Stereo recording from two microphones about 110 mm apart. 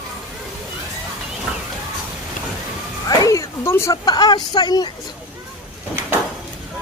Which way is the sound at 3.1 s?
30° left (ahead or behind).